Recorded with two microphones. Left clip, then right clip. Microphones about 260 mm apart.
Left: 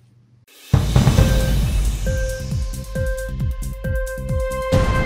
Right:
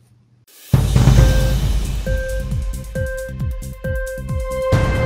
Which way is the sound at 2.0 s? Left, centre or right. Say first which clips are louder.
Right 2 dB; centre.